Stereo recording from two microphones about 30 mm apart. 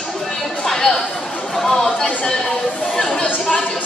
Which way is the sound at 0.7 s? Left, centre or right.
Centre.